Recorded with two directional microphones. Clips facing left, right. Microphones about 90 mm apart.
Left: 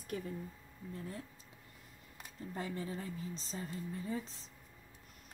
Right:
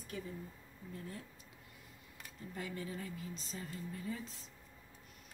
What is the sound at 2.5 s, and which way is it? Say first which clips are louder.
Speech: left 2 dB; 35° left (ahead or behind).